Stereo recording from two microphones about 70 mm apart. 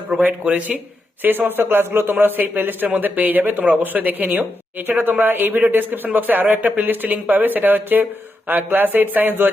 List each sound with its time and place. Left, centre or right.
0.2 s a man's voice: right